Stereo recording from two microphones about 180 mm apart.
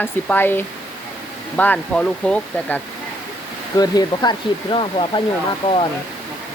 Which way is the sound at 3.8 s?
20° left (ahead or behind).